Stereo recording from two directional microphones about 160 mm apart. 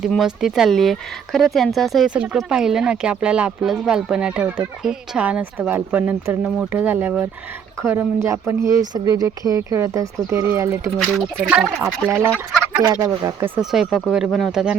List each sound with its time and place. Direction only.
0.0 s speech: centre (ahead or behind)
11.4 s speech: 5° right (ahead or behind)
12.8 s speech: 20° right (ahead or behind)
13.6 s speech: centre (ahead or behind)